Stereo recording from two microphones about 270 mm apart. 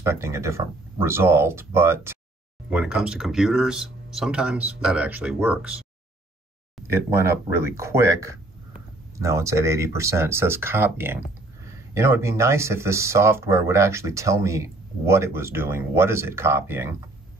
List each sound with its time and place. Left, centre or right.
0.0 s speech: centre
6.9 s speech: centre